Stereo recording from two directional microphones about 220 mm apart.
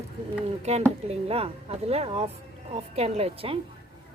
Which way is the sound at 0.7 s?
30° right (ahead or behind).